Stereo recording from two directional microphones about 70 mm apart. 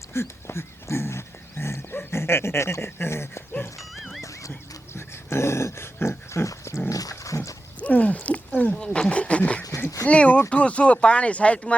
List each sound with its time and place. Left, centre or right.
0.1 s dog: left
3.8 s music: centre
4.2 s a sound: left
4.9 s dog: left
7.8 s a sound: left
10.5 s speech: centre